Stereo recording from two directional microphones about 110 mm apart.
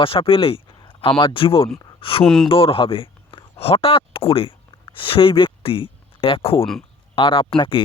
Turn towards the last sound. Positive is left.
turn(degrees=55)  # may be behind; listen again after turning